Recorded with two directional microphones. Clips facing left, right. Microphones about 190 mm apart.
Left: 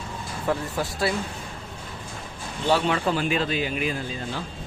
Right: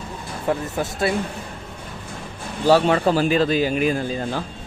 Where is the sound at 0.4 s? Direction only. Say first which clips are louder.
Right 3 dB; 25° right (ahead or behind).